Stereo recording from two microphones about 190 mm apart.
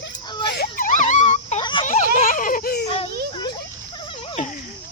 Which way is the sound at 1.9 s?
45° left (ahead or behind).